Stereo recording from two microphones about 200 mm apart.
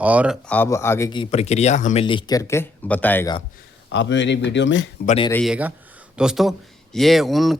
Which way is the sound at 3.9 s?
60° left (ahead or behind).